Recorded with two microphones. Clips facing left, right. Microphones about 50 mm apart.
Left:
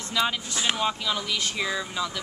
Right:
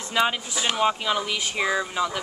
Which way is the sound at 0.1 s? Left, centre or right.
Right.